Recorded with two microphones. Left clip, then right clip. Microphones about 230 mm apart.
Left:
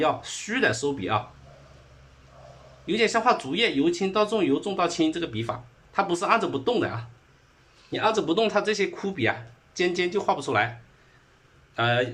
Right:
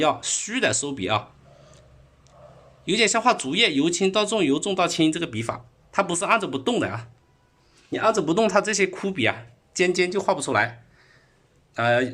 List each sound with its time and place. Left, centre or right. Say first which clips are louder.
0.0 s speech: right 3 dB; right
2.8 s speech: right 2 dB; right
11.7 s speech: right 3 dB; right